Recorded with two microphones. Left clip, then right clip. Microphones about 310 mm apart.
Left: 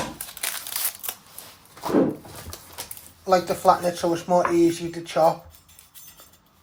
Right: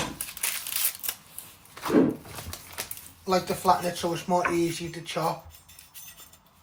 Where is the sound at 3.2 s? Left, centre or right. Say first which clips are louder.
Left 6 dB; left.